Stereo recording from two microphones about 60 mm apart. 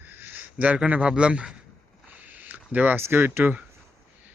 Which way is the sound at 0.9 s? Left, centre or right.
Centre.